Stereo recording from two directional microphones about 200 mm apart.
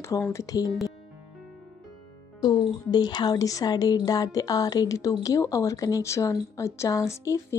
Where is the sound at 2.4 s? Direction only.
20° left (ahead or behind).